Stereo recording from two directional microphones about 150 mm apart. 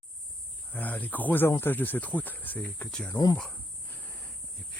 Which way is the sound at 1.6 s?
15° left (ahead or behind).